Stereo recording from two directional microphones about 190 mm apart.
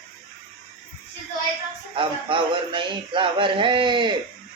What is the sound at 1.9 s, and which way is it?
Speech, 25° right (ahead or behind).